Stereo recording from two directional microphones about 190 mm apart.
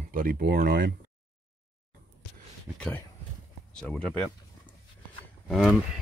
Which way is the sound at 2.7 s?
5° left (ahead or behind).